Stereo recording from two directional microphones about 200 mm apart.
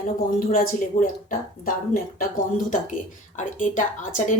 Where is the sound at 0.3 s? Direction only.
45° left (ahead or behind).